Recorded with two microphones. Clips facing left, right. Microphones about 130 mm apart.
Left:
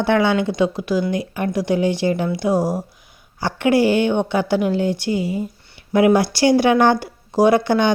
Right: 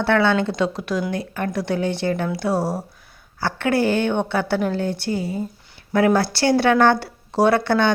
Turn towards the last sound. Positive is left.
turn(degrees=15)  # may be behind; listen again after turning